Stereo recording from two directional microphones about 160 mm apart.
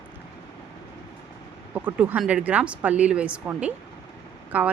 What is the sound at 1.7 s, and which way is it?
A woman's voice, 10° right (ahead or behind).